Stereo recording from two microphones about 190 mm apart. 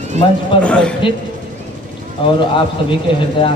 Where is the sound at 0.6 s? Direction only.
5° left (ahead or behind).